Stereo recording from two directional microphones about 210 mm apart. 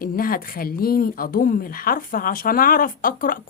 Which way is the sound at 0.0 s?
45° left (ahead or behind).